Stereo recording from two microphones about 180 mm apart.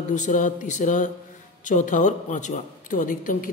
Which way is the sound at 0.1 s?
45° left (ahead or behind).